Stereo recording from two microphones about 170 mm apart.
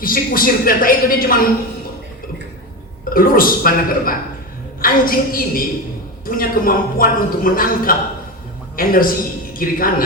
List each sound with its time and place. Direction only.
0.0 s a woman's voice: 55° left (ahead or behind)
3.1 s a woman's voice: 55° left (ahead or behind)